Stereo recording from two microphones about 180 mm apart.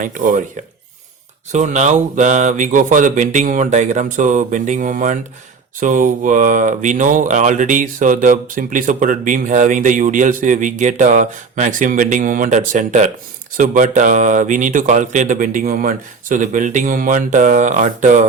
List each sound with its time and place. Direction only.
0.0 s speech: 45° right (ahead or behind)
1.5 s speech: 40° right (ahead or behind)